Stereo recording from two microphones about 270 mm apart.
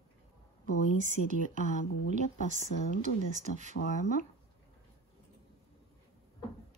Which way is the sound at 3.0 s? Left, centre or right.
Right.